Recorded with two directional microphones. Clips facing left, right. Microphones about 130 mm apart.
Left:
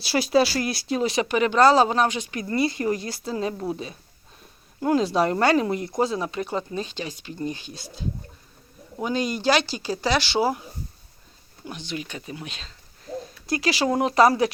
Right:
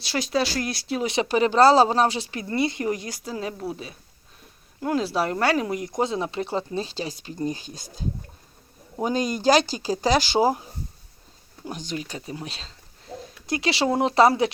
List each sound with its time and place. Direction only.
0.0 s speech: 5° left (ahead or behind)
1.0 s speech: 25° right (ahead or behind)
3.3 s speech: 5° right (ahead or behind); by 14.5 s 25° right (ahead or behind)